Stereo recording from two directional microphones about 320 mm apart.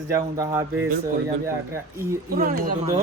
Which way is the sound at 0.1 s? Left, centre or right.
Centre.